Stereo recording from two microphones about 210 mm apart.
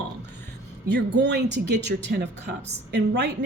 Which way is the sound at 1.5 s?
55° right (ahead or behind).